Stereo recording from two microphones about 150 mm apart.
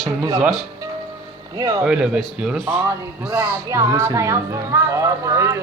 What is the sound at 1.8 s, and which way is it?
Speech, 5° right (ahead or behind).